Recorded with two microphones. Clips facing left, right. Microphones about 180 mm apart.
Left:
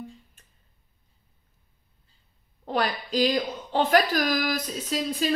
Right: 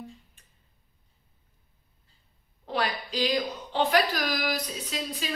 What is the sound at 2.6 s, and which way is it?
A woman's voice, 45° left (ahead or behind).